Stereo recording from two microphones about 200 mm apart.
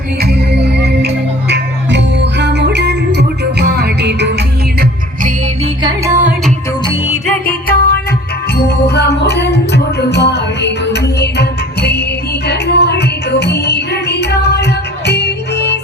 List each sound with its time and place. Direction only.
0.2 s music: 50° right (ahead or behind)
5.8 s music: 10° right (ahead or behind)
7.4 s music: 50° left (ahead or behind)